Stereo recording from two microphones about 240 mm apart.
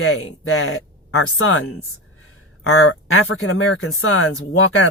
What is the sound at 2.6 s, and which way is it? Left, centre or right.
Speech, left.